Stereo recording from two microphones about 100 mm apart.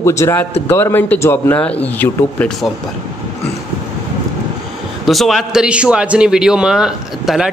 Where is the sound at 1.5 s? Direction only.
15° left (ahead or behind).